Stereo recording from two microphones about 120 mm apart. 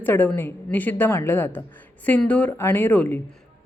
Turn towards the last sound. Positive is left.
turn(degrees=15)  # may be behind; listen again after turning